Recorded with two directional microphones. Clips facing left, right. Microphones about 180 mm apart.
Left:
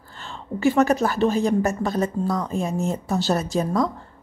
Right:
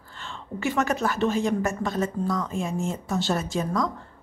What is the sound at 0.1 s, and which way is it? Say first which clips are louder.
A woman's voice: left 4 dB; 35° left (ahead or behind).